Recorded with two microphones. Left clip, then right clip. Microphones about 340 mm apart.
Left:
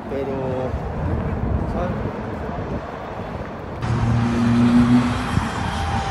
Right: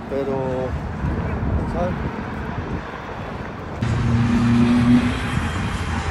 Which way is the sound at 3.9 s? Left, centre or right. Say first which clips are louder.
Even; left.